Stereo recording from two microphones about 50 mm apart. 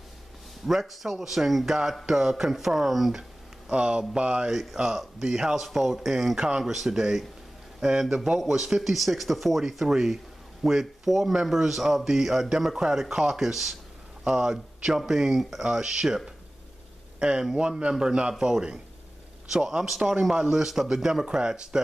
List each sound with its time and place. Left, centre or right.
0.7 s speech: centre
3.7 s speech: right
4.5 s a man's voice: centre
17.2 s a man's voice: centre